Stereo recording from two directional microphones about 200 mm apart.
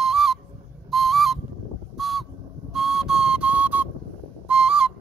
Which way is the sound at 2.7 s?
Centre (ahead or behind).